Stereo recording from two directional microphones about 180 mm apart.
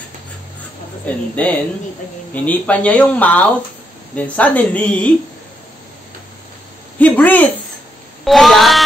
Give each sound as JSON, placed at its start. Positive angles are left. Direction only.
{"t": 1.0, "sound": "speech", "side_deg": 10}
{"t": 7.0, "sound": "speech", "side_deg": 10}